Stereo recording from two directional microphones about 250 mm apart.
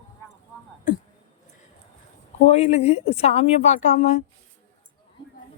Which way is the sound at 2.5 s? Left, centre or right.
Left.